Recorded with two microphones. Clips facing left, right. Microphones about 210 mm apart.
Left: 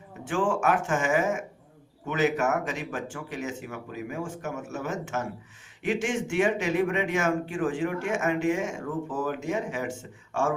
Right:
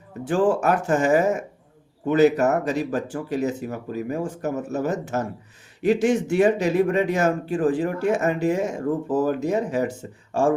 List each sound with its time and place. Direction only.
0.3 s speech: 35° right (ahead or behind)